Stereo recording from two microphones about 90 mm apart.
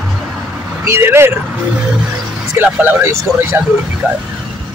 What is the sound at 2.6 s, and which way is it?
Speech, 20° right (ahead or behind).